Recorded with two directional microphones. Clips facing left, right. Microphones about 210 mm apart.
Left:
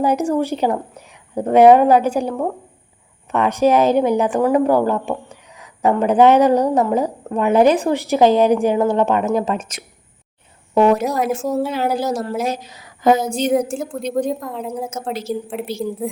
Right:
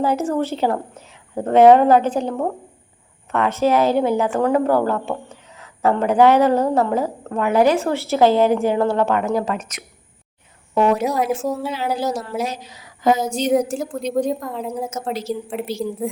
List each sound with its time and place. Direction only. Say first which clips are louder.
0.0 s speech: left 2 dB; 15° left (ahead or behind)
3.3 s a woman's voice: left 2 dB; 15° left (ahead or behind)
10.8 s speech: left 3 dB; 40° left (ahead or behind)
11.0 s a woman's voice: even; centre (ahead or behind)
11.6 s a woman's voice: left 3 dB; 50° left (ahead or behind)
13.5 s a woman's voice: right 3 dB; centre (ahead or behind)